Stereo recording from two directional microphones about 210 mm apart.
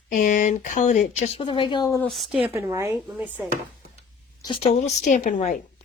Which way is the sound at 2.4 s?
15° right (ahead or behind).